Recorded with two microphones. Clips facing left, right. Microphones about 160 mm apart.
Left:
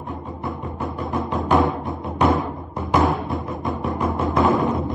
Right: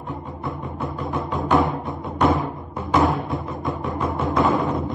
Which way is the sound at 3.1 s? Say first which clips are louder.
Left 1 dB; centre (ahead or behind).